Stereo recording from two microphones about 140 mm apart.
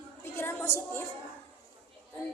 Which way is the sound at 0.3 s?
15° left (ahead or behind).